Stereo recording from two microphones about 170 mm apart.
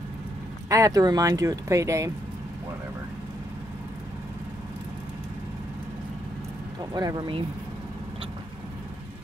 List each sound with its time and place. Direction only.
0.7 s speech: 20° right (ahead or behind)
6.9 s speech: 25° right (ahead or behind)